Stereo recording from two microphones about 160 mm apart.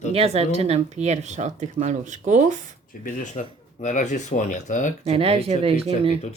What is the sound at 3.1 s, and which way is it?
Speech, 55° left (ahead or behind).